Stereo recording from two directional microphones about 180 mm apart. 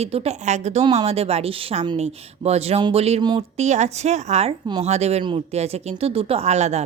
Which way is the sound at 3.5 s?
40° right (ahead or behind).